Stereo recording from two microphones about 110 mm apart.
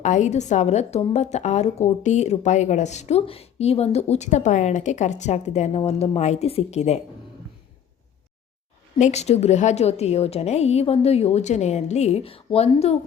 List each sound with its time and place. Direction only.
0.0 s speech: 90° left
9.0 s a woman's voice: 90° left; by 13.0 s 65° left (ahead or behind)